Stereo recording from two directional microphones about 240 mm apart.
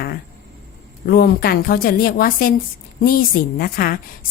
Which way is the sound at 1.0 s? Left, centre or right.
Left.